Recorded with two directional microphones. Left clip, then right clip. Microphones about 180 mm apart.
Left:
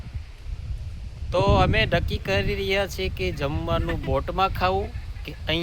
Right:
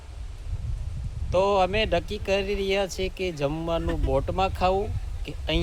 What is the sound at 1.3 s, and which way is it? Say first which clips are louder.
Speech: left 1 dB; 15° left (ahead or behind).